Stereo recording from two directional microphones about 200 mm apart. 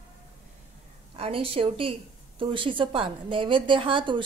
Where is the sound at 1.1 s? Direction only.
30° right (ahead or behind).